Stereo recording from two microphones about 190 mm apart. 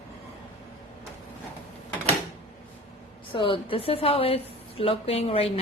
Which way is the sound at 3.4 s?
25° left (ahead or behind).